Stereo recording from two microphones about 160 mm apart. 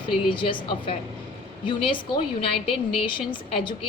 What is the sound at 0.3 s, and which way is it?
A woman's voice, 30° left (ahead or behind).